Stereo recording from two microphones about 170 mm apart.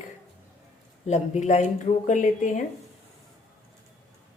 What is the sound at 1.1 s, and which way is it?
Speech, 40° left (ahead or behind).